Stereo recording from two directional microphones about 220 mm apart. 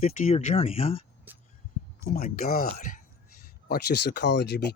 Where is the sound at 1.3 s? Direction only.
10° right (ahead or behind).